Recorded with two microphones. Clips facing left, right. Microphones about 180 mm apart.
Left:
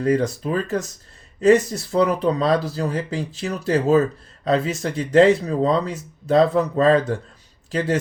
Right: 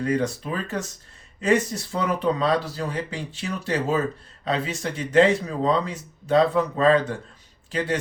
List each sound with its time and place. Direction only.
0.0 s speech: 35° left (ahead or behind)